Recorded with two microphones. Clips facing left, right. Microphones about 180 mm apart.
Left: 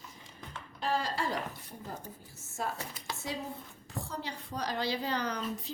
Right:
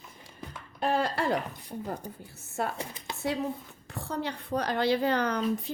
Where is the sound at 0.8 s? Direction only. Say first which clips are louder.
Right 5 dB; 60° right (ahead or behind).